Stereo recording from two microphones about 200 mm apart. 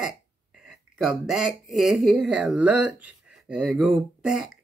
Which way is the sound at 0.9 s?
Centre (ahead or behind).